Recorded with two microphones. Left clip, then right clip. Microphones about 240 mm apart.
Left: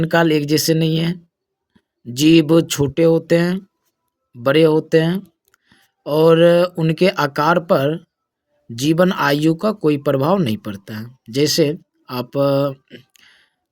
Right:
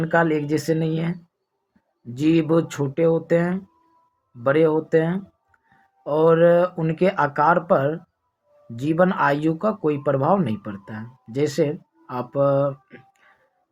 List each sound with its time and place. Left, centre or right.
0.0 s speech: left